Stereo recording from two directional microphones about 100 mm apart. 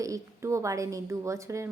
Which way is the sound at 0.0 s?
30° right (ahead or behind).